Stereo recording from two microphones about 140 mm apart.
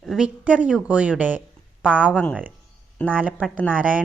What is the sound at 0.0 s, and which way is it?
A woman's voice, centre (ahead or behind).